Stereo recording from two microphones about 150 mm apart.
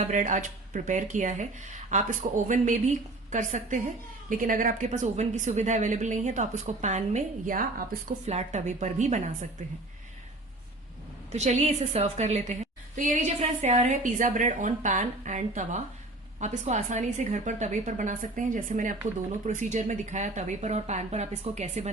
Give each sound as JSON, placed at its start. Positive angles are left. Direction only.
{"t": 0.0, "sound": "speech", "side_deg": -55}
{"t": 8.3, "sound": "speech", "side_deg": -50}
{"t": 11.3, "sound": "speech", "side_deg": -50}